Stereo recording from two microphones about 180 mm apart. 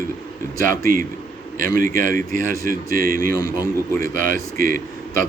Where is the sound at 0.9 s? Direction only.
50° right (ahead or behind).